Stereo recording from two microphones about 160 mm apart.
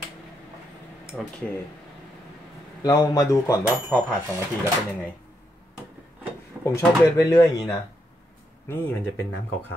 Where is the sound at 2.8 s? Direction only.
20° left (ahead or behind).